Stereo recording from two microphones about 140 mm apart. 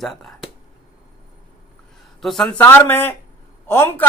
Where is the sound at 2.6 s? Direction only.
15° left (ahead or behind).